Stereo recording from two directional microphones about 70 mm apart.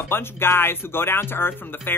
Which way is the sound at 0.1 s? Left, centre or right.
Left.